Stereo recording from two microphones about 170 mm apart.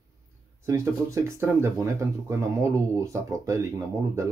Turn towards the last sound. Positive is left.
turn(degrees=-15)  # may be behind; listen again after turning